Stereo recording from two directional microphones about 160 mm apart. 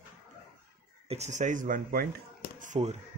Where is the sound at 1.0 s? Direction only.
45° right (ahead or behind); by 2.1 s 60° right (ahead or behind).